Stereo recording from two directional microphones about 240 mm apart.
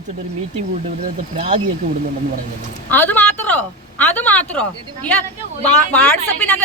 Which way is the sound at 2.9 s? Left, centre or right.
Centre.